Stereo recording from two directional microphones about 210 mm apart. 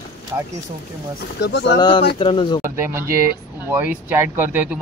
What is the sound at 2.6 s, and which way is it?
Speech, 10° right (ahead or behind).